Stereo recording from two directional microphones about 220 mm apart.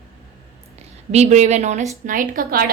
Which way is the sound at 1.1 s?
30° right (ahead or behind).